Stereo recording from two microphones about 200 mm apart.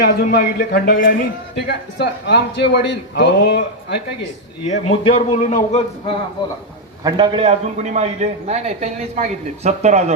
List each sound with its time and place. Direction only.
0.0 s a man's voice: 50° left (ahead or behind)
4.7 s a man's voice: 35° left (ahead or behind)
7.0 s a man's voice: 25° right (ahead or behind)